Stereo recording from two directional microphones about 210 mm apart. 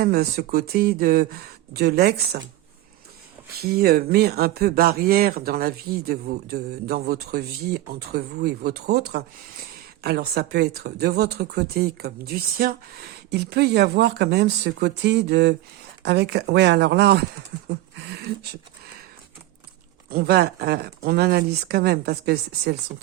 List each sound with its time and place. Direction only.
0.0 s speech: 50° right (ahead or behind)
3.6 s speech: 50° right (ahead or behind)
17.7 s a sound: 50° right (ahead or behind)
20.1 s speech: 45° right (ahead or behind)